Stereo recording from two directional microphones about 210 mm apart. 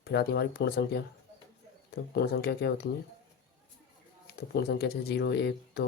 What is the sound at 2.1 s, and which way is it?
Speech, 50° left (ahead or behind).